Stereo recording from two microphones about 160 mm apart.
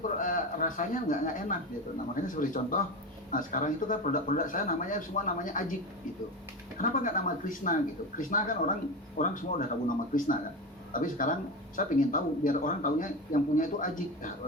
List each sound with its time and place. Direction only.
0.0 s a man's voice: 55° left (ahead or behind)
6.7 s a man's voice: 55° left (ahead or behind)